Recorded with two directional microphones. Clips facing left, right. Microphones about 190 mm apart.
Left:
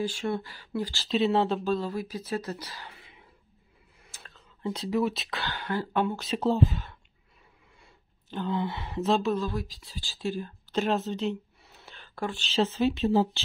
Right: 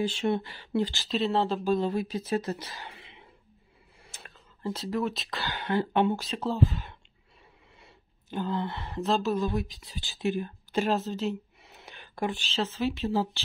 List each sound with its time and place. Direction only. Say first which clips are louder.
0.0 s speech: right 2 dB; 20° right (ahead or behind)
1.0 s speech: left 7 dB; centre (ahead or behind)
1.6 s speech: right 2 dB; 15° right (ahead or behind)
1.9 s speech: right 3 dB; 25° right (ahead or behind)
4.6 s speech: left 3 dB; centre (ahead or behind)
5.5 s speech: right 4 dB; 20° right (ahead or behind)
6.3 s speech: left 5 dB; 25° left (ahead or behind)
8.4 s speech: left 1 dB; centre (ahead or behind)
9.4 s speech: right 3 dB; 20° right (ahead or behind); by 11.3 s centre (ahead or behind)
11.6 s a sound: right 2 dB; 20° right (ahead or behind)
12.5 s speech: left 7 dB; 25° left (ahead or behind)